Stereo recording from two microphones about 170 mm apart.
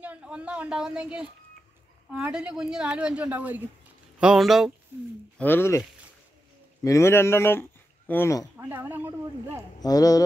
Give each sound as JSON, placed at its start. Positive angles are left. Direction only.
{"t": 0.0, "sound": "speech", "side_deg": -5}
{"t": 5.4, "sound": "speech", "side_deg": 15}
{"t": 8.5, "sound": "speech", "side_deg": -10}
{"t": 9.8, "sound": "speech", "side_deg": 20}